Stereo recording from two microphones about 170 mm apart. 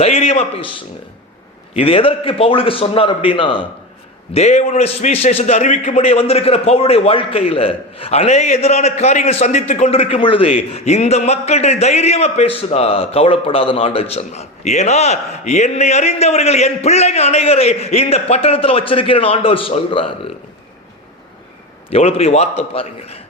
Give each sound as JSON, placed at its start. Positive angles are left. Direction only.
{"t": 0.0, "sound": "a sound", "side_deg": 35}
{"t": 1.7, "sound": "a man's voice", "side_deg": 35}
{"t": 4.4, "sound": "a man's voice", "side_deg": 40}
{"t": 21.8, "sound": "a man's voice", "side_deg": 35}